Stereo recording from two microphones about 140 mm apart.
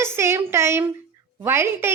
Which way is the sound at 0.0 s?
20° right (ahead or behind).